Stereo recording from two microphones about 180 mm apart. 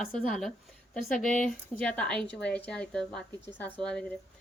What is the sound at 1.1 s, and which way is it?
Speech, 45° left (ahead or behind).